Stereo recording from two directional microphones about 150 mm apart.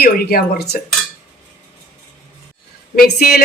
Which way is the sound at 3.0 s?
90° left.